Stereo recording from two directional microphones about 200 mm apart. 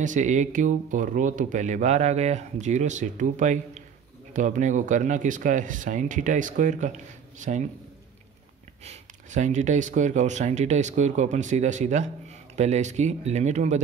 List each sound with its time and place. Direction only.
0.0 s speech: 40° right (ahead or behind)
8.8 s speech: 35° right (ahead or behind)